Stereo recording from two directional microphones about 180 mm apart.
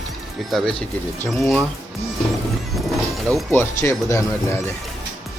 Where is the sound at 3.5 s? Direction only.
15° left (ahead or behind).